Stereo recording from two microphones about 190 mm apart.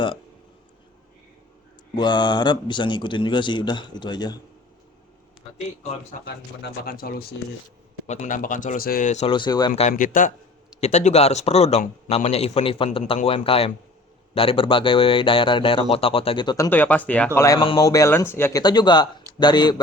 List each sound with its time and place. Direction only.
2.0 s speech: 25° left (ahead or behind)
5.5 s a man's voice: 35° left (ahead or behind)
6.2 s speech: 50° left (ahead or behind)
8.0 s speech: 35° left (ahead or behind)
9.3 s speech: 25° left (ahead or behind)
9.8 s speech: 45° left (ahead or behind)
10.8 s a man's voice: 35° left (ahead or behind)
16.6 s speech: 10° left (ahead or behind)